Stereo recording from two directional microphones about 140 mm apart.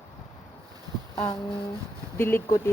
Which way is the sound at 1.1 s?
25° left (ahead or behind).